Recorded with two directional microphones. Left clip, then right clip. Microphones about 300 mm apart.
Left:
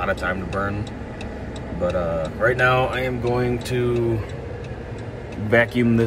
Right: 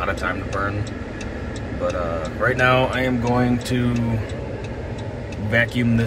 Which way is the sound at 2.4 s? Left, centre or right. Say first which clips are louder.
Right 1 dB; centre.